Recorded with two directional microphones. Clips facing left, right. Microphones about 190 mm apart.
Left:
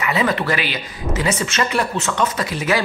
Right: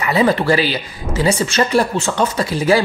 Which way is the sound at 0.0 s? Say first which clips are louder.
Right 5 dB; 35° right (ahead or behind).